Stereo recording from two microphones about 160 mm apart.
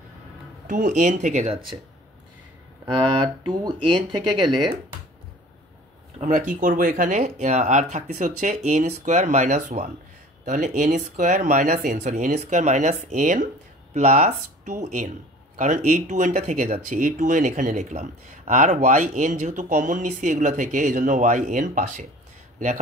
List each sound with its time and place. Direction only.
0.7 s speech: 55° right (ahead or behind); by 1.8 s 40° right (ahead or behind)
2.8 s speech: 35° right (ahead or behind)
6.1 s speech: 50° right (ahead or behind)